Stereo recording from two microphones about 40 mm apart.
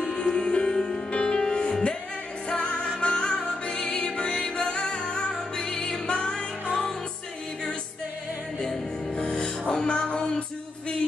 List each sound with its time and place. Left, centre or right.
0.0 s music: centre
9.1 s music: left